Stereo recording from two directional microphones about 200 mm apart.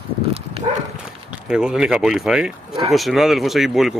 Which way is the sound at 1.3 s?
5° right (ahead or behind).